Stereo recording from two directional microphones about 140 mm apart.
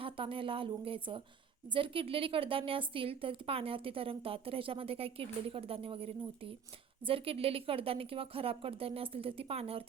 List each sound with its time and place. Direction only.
0.0 s a woman's voice: 40° right (ahead or behind)